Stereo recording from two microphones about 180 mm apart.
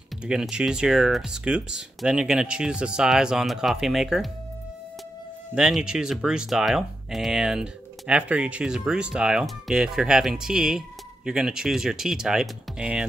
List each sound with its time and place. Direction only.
0.2 s speech: 5° right (ahead or behind)
5.5 s speech: 5° right (ahead or behind)